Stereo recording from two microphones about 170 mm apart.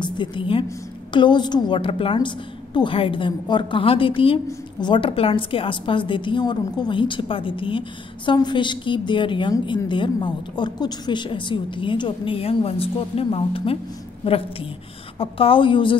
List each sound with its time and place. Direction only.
0.0 s a woman's voice: 30° left (ahead or behind)